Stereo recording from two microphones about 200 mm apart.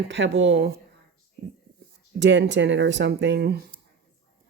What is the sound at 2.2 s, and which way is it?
Speech, 60° right (ahead or behind).